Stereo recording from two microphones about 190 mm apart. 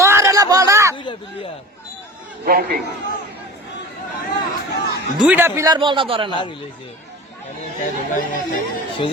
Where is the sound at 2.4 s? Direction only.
50° right (ahead or behind).